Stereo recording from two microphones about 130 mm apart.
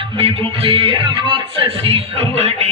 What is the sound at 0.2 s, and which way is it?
Speech, 45° right (ahead or behind).